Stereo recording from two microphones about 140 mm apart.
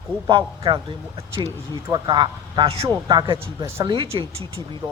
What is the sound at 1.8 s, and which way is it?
A man's voice, 30° right (ahead or behind).